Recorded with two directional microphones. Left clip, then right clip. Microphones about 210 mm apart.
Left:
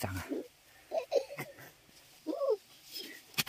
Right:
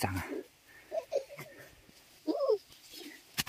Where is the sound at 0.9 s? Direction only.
40° left (ahead or behind).